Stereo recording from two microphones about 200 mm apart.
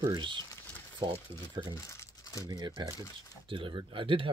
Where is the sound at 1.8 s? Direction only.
15° left (ahead or behind).